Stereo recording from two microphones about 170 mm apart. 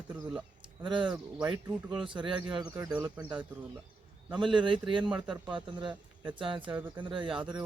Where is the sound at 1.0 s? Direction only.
5° right (ahead or behind).